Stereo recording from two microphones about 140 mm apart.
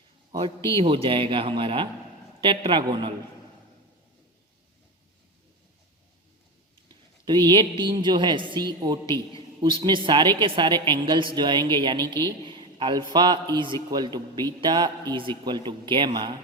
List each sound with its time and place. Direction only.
0.3 s a man's voice: 35° right (ahead or behind)
6.8 s a woman's voice: 30° right (ahead or behind)